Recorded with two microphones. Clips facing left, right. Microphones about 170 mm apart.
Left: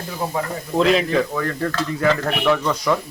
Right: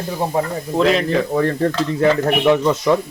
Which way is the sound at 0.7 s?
Centre (ahead or behind).